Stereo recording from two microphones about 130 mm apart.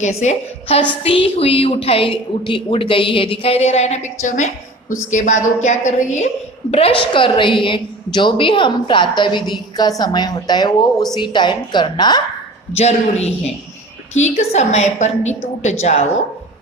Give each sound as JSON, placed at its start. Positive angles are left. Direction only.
{"t": 0.0, "sound": "a woman's voice", "side_deg": 60}
{"t": 1.0, "sound": "a woman's voice", "side_deg": 45}
{"t": 12.7, "sound": "a woman's voice", "side_deg": 55}